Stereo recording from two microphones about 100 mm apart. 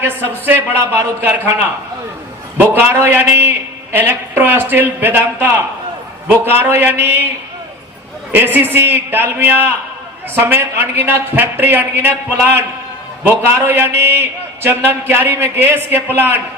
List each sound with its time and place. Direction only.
0.0 s a man's voice: 20° right (ahead or behind)
2.6 s a man's voice: 20° right (ahead or behind)
8.3 s a man's voice: 20° right (ahead or behind)